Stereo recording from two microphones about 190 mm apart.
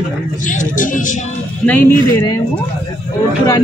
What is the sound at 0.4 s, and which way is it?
Speech, 40° left (ahead or behind).